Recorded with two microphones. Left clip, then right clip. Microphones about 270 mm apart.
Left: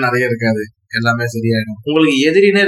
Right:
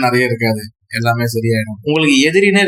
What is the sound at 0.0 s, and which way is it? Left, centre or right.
Speech, right.